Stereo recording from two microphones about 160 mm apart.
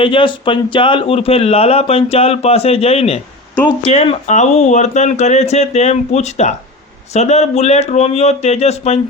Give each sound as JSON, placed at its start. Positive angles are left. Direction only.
{"t": 0.0, "sound": "speech", "side_deg": 30}